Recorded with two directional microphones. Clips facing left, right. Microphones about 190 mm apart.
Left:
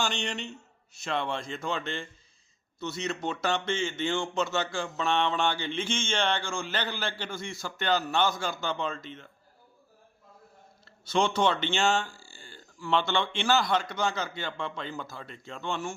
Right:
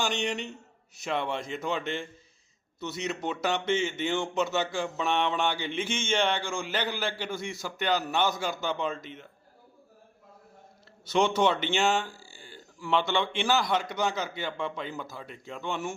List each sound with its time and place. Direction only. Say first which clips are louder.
0.0 s speech: right 2 dB; 15° right (ahead or behind)
11.1 s speech: right 1 dB; 15° right (ahead or behind)